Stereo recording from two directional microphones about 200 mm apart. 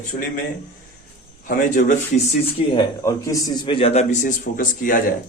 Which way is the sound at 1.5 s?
40° left (ahead or behind).